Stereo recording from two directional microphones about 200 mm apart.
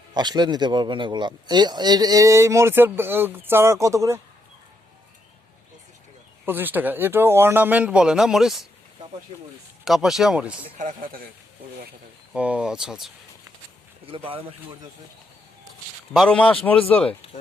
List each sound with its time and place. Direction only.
0.1 s speech: 20° right (ahead or behind)
6.4 s speech: 10° right (ahead or behind)
9.8 s speech: centre (ahead or behind)
10.8 s speech: 40° right (ahead or behind)
12.3 s speech: 5° right (ahead or behind)
14.1 s speech: 25° right (ahead or behind)
16.1 s speech: 5° left (ahead or behind)